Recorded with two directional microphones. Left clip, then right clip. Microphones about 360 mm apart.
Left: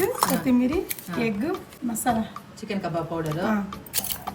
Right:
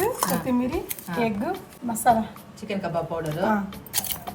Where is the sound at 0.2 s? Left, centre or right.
Centre.